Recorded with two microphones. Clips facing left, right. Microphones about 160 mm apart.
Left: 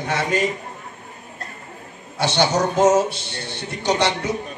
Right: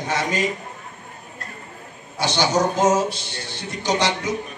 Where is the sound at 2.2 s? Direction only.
60° left (ahead or behind).